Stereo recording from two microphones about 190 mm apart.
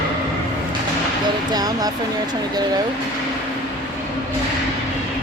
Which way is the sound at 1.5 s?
20° right (ahead or behind).